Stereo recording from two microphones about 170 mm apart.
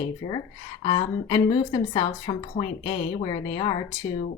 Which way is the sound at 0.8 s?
25° left (ahead or behind).